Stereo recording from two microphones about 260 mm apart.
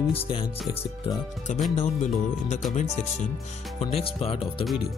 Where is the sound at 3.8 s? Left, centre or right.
Left.